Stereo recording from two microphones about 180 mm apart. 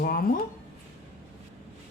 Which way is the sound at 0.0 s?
55° left (ahead or behind).